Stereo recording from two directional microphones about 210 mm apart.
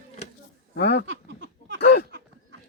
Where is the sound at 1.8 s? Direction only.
50° left (ahead or behind).